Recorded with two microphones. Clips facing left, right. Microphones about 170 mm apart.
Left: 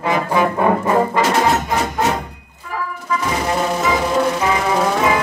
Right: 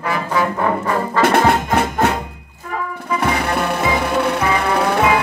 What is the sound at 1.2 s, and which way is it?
Brass instrument, 60° right (ahead or behind).